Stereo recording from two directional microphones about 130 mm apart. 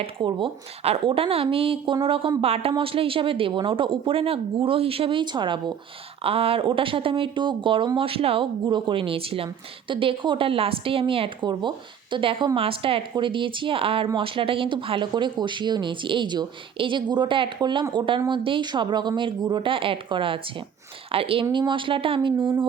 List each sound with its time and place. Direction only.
0.0 s a woman's voice: 40° right (ahead or behind)
6.2 s a woman's voice: 50° right (ahead or behind)